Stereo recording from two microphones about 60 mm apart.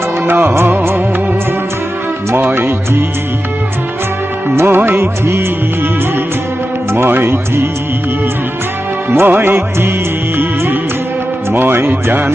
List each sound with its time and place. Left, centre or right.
0.3 s music: right
2.3 s music: right
4.5 s music: right
6.9 s music: right
9.0 s music: right
11.5 s music: right